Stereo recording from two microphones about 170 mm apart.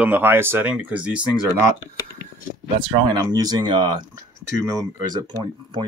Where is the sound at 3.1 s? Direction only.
25° right (ahead or behind).